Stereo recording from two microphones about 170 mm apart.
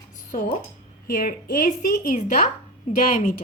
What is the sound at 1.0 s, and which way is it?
A woman's voice, 60° left (ahead or behind).